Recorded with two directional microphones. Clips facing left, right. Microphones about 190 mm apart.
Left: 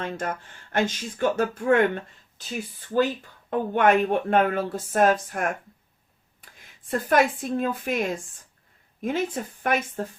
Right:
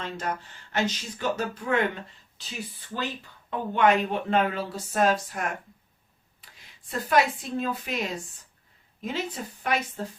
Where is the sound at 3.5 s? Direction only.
50° left (ahead or behind).